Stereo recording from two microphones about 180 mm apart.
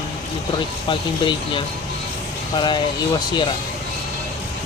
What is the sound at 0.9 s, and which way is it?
Speech, 25° left (ahead or behind).